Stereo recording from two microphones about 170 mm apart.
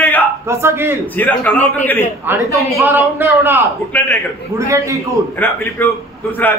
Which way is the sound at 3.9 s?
15° left (ahead or behind).